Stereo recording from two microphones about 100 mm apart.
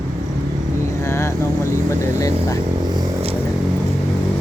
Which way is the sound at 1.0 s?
25° left (ahead or behind).